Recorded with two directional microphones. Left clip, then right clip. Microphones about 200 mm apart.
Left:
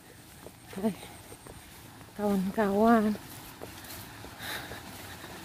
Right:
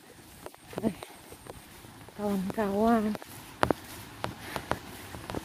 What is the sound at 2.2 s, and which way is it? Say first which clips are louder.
Speech: left 2 dB; 25° left (ahead or behind).